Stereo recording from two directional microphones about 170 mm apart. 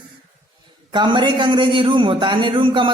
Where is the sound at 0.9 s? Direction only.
25° right (ahead or behind).